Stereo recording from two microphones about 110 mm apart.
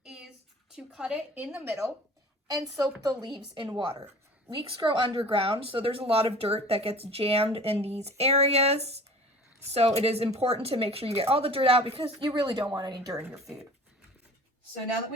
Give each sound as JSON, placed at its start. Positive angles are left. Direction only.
{"t": 0.0, "sound": "a sound", "side_deg": -5}
{"t": 0.7, "sound": "a woman's voice", "side_deg": -5}
{"t": 3.0, "sound": "a woman's voice", "side_deg": -35}
{"t": 12.2, "sound": "a woman's voice", "side_deg": -45}